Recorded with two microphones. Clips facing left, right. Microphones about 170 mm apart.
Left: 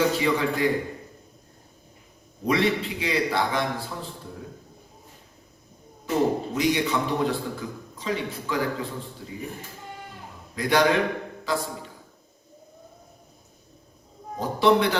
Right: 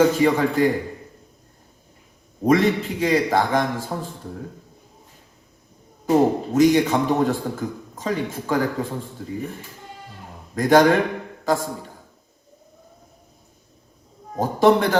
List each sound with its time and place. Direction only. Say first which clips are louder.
0.0 s a man's voice: right 6 dB; 45° right (ahead or behind)
2.4 s a man's voice: right 5 dB; 45° right (ahead or behind)
6.1 s a man's voice: right 6 dB; 45° right (ahead or behind)
10.5 s a man's voice: right 6 dB; 45° right (ahead or behind)
14.3 s a man's voice: right 4 dB; 45° right (ahead or behind)